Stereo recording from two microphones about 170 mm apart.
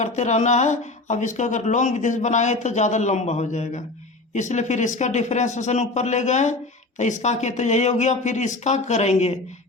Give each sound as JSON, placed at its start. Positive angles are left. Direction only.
{"t": 0.0, "sound": "speech", "side_deg": 45}